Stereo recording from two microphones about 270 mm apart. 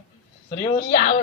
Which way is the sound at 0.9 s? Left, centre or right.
Left.